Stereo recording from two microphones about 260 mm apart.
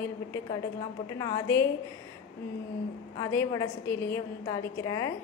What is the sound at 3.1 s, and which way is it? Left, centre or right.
A woman's voice, centre.